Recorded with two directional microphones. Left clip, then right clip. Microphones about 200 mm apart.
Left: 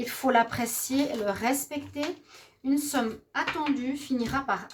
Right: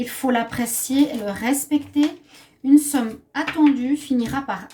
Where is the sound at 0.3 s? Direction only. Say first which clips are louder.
Right 1 dB; 40° left (ahead or behind).